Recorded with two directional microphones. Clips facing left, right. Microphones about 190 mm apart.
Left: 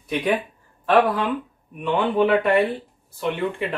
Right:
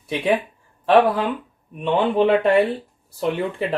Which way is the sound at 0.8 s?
25° right (ahead or behind).